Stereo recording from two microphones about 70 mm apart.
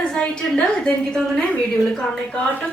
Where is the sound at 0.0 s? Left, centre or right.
Centre.